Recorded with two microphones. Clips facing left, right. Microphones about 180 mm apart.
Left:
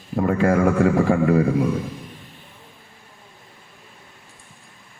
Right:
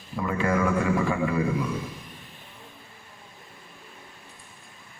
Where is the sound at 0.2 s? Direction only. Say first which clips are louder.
Left 7 dB; 55° left (ahead or behind).